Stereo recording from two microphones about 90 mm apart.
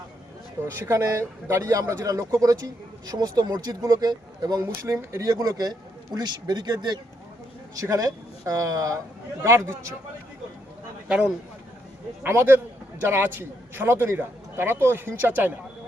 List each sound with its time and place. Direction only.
0.7 s a man's voice: 30° right (ahead or behind); by 7.0 s 50° right (ahead or behind)
7.8 s a man's voice: 40° right (ahead or behind)
12.2 s a man's voice: 25° right (ahead or behind)